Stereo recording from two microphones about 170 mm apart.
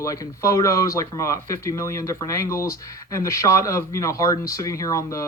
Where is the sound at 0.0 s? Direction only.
20° left (ahead or behind).